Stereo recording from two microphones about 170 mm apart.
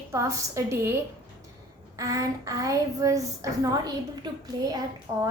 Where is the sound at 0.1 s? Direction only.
20° right (ahead or behind).